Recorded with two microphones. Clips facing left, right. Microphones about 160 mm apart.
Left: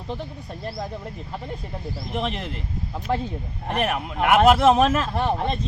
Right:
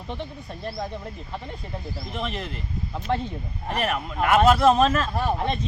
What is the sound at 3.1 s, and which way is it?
Speech, 5° left (ahead or behind).